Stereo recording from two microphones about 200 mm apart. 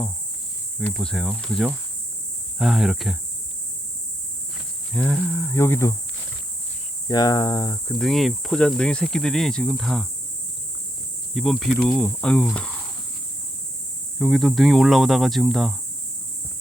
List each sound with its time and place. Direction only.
0.8 s speech: 5° left (ahead or behind)
4.9 s speech: 5° left (ahead or behind)
7.1 s speech: 20° left (ahead or behind)
7.9 s speech: centre (ahead or behind)
11.3 s speech: centre (ahead or behind)
14.2 s speech: centre (ahead or behind)